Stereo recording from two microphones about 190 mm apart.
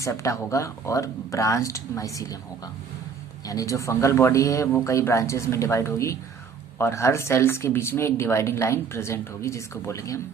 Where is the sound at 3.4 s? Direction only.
20° left (ahead or behind).